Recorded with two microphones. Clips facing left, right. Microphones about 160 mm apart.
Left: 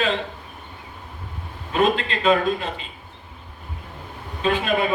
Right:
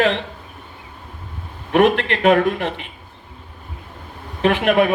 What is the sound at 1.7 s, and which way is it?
A man's voice, 70° right (ahead or behind).